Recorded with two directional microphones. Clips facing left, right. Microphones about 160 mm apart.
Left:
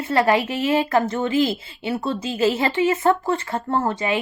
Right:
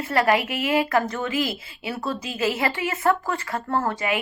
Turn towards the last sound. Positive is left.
turn(degrees=25)  # may be behind; listen again after turning